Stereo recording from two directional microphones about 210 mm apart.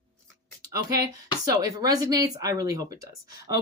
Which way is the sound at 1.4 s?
15° right (ahead or behind).